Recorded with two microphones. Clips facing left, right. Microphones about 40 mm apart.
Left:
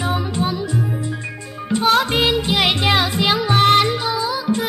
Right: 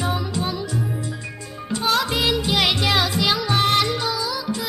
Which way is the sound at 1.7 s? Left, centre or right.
Left.